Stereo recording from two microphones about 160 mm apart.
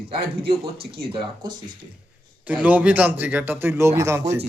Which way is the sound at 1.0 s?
30° right (ahead or behind).